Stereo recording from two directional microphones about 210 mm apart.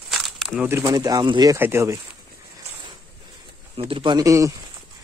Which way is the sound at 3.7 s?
25° right (ahead or behind).